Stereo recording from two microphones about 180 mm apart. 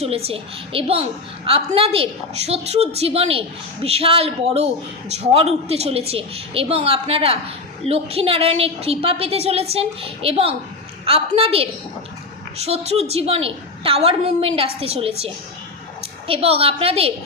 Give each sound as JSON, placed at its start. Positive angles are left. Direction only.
{"t": 0.0, "sound": "a man's voice", "side_deg": -35}